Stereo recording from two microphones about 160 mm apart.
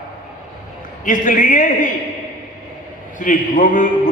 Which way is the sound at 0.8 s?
55° left (ahead or behind).